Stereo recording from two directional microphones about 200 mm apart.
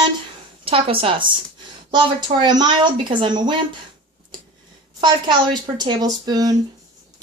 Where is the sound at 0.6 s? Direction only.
25° right (ahead or behind).